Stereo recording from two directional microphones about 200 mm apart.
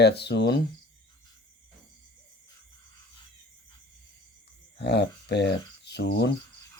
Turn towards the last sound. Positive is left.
turn(degrees=55)  # may be behind; listen again after turning